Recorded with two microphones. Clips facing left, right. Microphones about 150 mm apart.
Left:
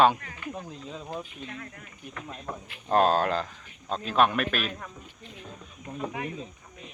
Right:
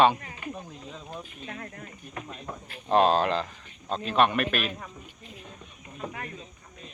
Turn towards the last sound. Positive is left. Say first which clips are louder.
# left 4 dB
turn(degrees=10)  # may be behind; listen again after turning